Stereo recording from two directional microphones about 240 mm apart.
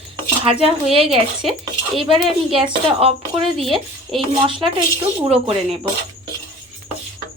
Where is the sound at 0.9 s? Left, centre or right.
Right.